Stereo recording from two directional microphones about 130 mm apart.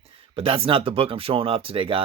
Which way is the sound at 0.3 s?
45° right (ahead or behind).